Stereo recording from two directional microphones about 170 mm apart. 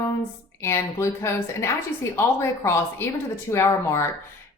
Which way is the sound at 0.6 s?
15° left (ahead or behind).